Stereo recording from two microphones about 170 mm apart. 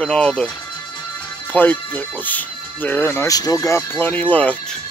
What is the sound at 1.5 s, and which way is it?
Speech, 10° left (ahead or behind).